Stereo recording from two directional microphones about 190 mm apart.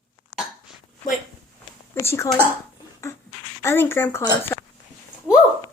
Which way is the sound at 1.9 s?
15° left (ahead or behind).